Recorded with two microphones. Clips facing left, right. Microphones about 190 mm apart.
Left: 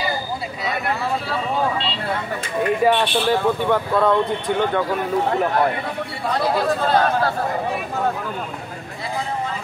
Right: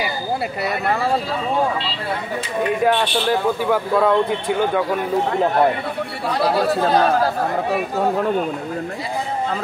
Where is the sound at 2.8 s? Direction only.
Centre (ahead or behind).